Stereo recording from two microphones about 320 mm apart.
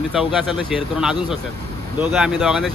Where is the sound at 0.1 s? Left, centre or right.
Centre.